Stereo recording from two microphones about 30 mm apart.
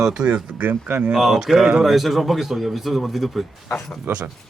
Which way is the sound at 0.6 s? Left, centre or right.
Right.